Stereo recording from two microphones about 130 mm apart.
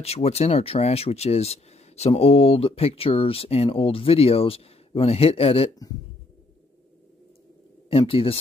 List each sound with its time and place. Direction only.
0.0 s speech: 55° left (ahead or behind)
8.1 s speech: 45° left (ahead or behind)